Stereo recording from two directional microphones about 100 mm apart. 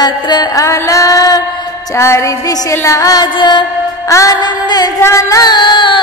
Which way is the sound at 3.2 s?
50° left (ahead or behind).